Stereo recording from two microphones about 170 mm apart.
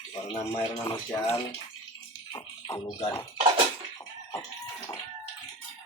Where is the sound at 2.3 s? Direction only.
20° left (ahead or behind).